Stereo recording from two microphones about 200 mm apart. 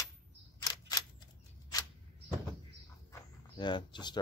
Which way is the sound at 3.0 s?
15° left (ahead or behind).